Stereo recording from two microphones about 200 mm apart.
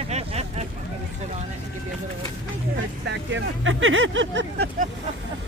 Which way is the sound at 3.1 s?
70° right (ahead or behind).